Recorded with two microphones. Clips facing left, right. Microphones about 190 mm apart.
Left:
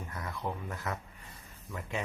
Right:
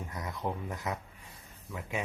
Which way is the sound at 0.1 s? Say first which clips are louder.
Right 1 dB; 20° right (ahead or behind).